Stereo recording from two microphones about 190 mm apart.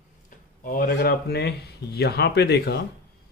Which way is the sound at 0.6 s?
50° left (ahead or behind).